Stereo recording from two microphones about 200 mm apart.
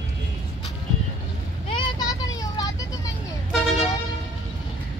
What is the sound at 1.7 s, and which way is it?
Vehicle, 25° left (ahead or behind).